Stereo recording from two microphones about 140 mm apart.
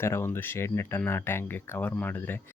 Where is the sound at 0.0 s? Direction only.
15° left (ahead or behind).